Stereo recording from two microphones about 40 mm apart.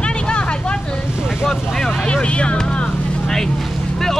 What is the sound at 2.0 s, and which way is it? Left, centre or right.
Speech, left.